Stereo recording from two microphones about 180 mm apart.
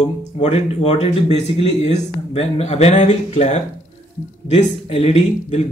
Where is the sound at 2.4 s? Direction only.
35° left (ahead or behind).